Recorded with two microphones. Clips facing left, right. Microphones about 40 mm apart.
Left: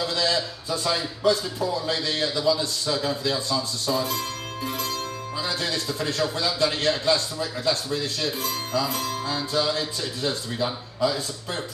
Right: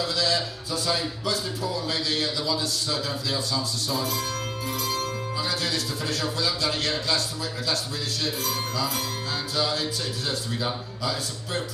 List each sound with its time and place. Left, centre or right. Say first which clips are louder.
0.0 s a man's voice: left 1 dB; left
2.2 s a man's voice: left 4 dB; left
5.5 s a man's voice: left 3 dB; left